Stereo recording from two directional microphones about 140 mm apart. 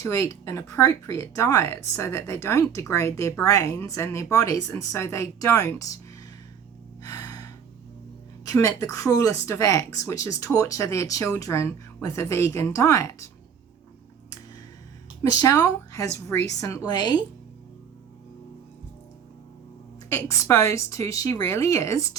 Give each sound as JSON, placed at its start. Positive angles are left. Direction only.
{"t": 0.0, "sound": "speech", "side_deg": 20}
{"t": 7.0, "sound": "gasp", "side_deg": 25}
{"t": 8.4, "sound": "speech", "side_deg": 20}
{"t": 15.2, "sound": "speech", "side_deg": 25}
{"t": 20.1, "sound": "speech", "side_deg": 20}